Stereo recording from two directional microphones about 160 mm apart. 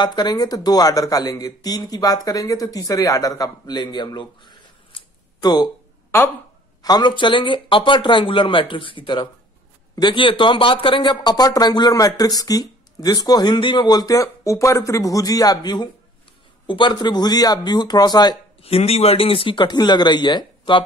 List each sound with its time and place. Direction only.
0.0 s speech: 25° left (ahead or behind)
6.8 s speech: 25° left (ahead or behind)
18.6 s speech: 40° left (ahead or behind)